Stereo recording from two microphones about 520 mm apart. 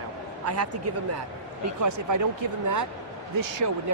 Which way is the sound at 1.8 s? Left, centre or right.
Right.